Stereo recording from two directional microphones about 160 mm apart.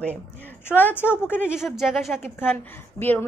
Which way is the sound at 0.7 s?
10° left (ahead or behind).